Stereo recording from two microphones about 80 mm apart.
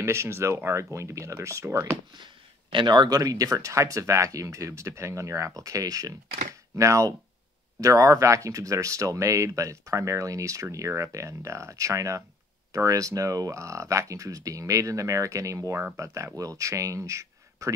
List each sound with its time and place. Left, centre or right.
0.0 s speech: right
2.7 s speech: right
3.2 s speech: right